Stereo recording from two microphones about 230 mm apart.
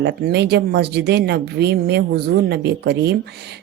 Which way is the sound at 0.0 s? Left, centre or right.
Right.